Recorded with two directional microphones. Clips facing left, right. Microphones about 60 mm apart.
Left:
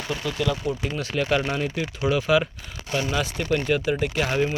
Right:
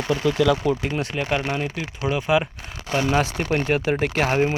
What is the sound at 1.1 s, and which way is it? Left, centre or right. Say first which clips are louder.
Speech: left 4 dB; right.